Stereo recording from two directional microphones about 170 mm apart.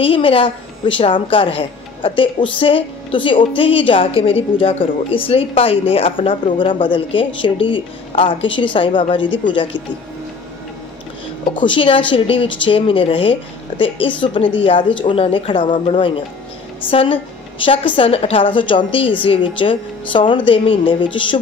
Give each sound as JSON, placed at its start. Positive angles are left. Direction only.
{"t": 0.0, "sound": "a woman's voice", "side_deg": 30}
{"t": 11.4, "sound": "a woman's voice", "side_deg": 30}